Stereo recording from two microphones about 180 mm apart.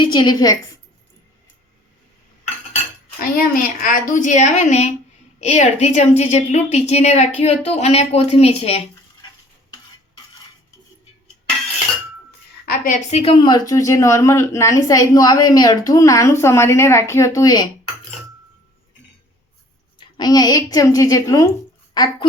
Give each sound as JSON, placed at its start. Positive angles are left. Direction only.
{"t": 0.0, "sound": "a woman's voice", "side_deg": 25}
{"t": 3.2, "sound": "a woman's voice", "side_deg": 50}
{"t": 12.6, "sound": "a woman's voice", "side_deg": 50}
{"t": 20.0, "sound": "a woman's voice", "side_deg": 20}